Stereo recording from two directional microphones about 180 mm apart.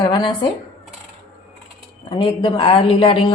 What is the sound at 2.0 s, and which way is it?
A woman's voice, 30° left (ahead or behind).